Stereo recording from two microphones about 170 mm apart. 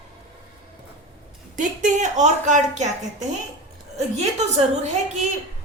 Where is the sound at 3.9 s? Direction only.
40° right (ahead or behind).